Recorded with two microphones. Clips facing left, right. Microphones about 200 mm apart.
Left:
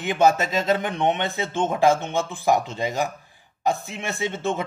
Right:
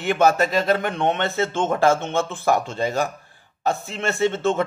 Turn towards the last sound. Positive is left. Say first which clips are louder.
# right 5 dB
turn(degrees=15)  # may be behind; listen again after turning